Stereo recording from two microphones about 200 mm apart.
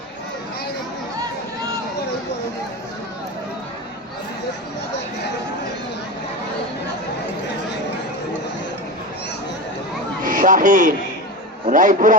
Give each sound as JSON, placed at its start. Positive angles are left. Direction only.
{"t": 10.2, "sound": "a man's voice", "side_deg": -40}